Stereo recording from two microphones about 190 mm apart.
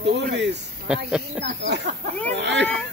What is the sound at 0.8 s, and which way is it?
Speech, 5° right (ahead or behind).